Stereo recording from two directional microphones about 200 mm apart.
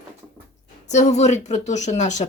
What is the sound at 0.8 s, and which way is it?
Speech, 35° left (ahead or behind).